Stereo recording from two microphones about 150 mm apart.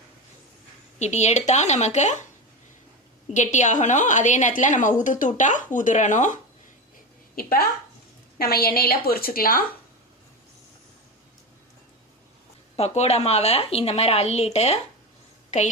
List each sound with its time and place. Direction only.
0.9 s a woman's voice: 50° left (ahead or behind)
3.3 s a woman's voice: 55° left (ahead or behind)
8.4 s a woman's voice: 90° left; by 9.6 s 75° left (ahead or behind)
12.7 s a woman's voice: 45° left (ahead or behind)
15.4 s a sound: 50° left (ahead or behind)